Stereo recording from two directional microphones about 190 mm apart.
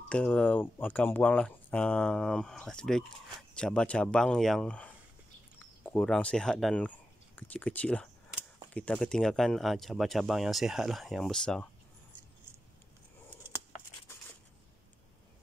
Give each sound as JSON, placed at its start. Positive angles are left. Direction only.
{"t": 0.1, "sound": "speech", "side_deg": 5}